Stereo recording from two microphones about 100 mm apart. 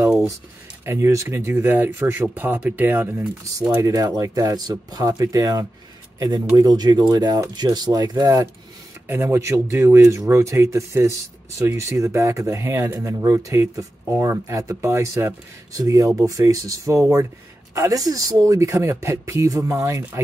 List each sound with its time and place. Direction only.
0.8 s speech: 25° right (ahead or behind)
3.8 s speech: 35° right (ahead or behind)
9.0 s speech: 20° right (ahead or behind)